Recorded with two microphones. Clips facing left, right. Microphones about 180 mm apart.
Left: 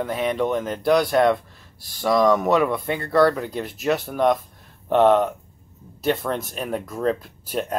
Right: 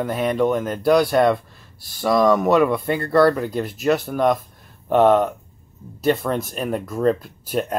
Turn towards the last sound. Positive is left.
turn(degrees=0)  # may be behind; listen again after turning